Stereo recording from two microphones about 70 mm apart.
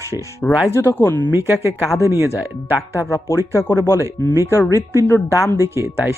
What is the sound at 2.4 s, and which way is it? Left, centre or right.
Speech, right.